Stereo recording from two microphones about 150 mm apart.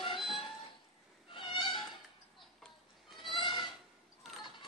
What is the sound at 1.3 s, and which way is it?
Cat, 35° left (ahead or behind).